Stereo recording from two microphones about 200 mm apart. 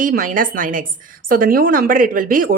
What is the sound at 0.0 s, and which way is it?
Speech, 45° right (ahead or behind).